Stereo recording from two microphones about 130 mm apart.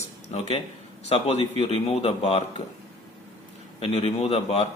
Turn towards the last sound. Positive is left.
turn(degrees=50)  # may be behind; listen again after turning